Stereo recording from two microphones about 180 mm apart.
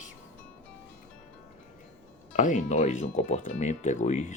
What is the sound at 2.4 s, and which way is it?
Speech, 45° left (ahead or behind).